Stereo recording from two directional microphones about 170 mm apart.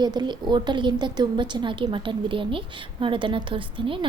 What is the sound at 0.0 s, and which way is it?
A woman's voice, 25° right (ahead or behind).